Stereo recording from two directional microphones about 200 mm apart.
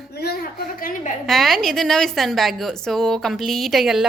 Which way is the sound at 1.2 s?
Centre (ahead or behind).